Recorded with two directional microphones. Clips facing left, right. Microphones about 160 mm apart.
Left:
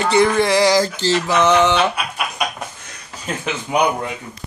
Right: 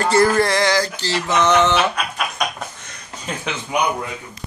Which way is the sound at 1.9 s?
5° left (ahead or behind).